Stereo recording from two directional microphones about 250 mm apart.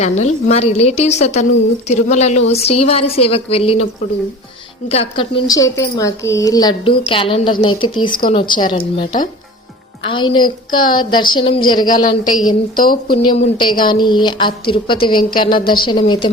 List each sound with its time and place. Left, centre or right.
0.0 s a woman's voice: left
4.9 s a woman's voice: left
12.7 s speech: left
13.2 s a woman's voice: centre